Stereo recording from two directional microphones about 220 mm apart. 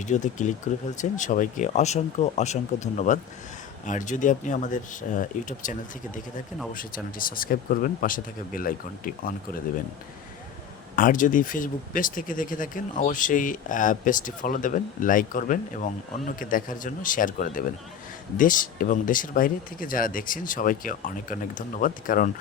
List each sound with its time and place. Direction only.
0.0 s speech: 35° left (ahead or behind)
6.7 s speech: 40° left (ahead or behind)
10.9 s speech: 40° left (ahead or behind)